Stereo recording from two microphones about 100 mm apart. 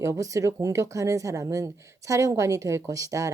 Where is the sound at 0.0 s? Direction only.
30° right (ahead or behind).